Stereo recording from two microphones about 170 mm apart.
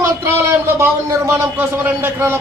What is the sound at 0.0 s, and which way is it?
A man's voice, 15° right (ahead or behind).